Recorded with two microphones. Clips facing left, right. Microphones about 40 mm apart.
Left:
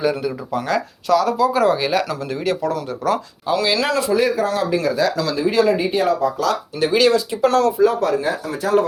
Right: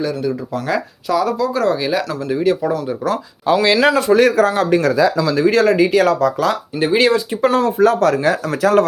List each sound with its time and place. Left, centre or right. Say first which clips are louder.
0.0 s speech: right 1 dB; centre
0.7 s speech: left 1 dB; centre
3.5 s speech: right 5 dB; right
4.4 s speech: right 4 dB; right
4.7 s speech: right 5 dB; right
6.4 s speech: right 2 dB; right
7.8 s speech: right 3 dB; right